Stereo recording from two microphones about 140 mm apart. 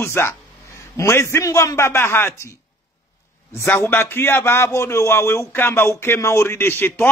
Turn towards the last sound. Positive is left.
turn(degrees=15)  # may be behind; listen again after turning